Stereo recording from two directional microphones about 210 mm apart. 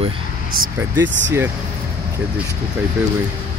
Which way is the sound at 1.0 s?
60° right (ahead or behind).